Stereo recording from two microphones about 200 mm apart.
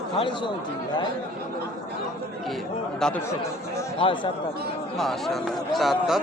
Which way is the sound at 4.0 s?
25° left (ahead or behind).